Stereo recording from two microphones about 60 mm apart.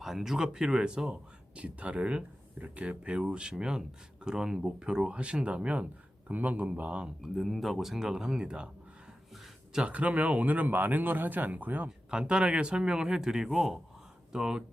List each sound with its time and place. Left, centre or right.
0.0 s speech: centre; by 7.1 s right
7.2 s speech: centre
9.3 s a sound: centre
9.8 s speech: right
11.9 s speech: centre